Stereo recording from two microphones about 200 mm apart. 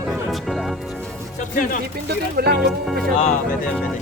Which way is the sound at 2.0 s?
55° right (ahead or behind).